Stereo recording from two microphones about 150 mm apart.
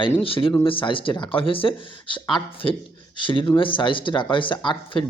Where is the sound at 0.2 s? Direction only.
35° left (ahead or behind).